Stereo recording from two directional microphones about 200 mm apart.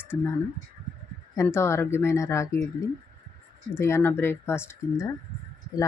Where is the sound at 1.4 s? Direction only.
15° left (ahead or behind).